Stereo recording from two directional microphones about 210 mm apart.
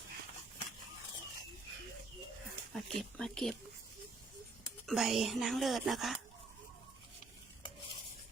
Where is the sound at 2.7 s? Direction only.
Centre (ahead or behind).